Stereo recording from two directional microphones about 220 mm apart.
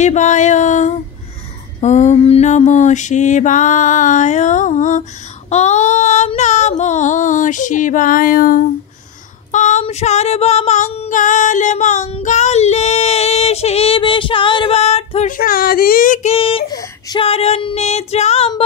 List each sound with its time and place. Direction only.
0.0 s mantra: 35° left (ahead or behind)
5.5 s female singing: 30° left (ahead or behind)